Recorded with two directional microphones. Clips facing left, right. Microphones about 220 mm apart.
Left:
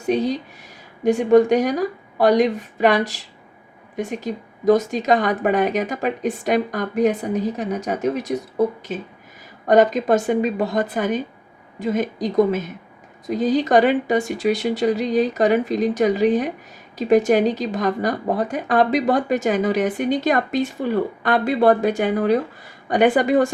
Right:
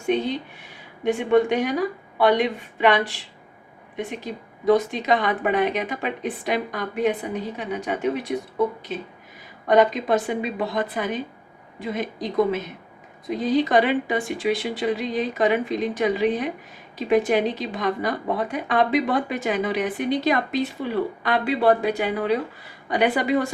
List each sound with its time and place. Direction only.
0.0 s a woman's voice: 40° left (ahead or behind)